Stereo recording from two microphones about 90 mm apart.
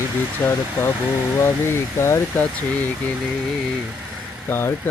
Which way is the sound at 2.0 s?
30° left (ahead or behind).